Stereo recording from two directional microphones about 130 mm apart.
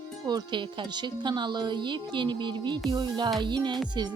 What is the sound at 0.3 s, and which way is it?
Speech, 35° right (ahead or behind).